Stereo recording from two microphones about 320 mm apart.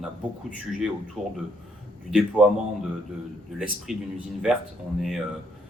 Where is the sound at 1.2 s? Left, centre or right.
Centre.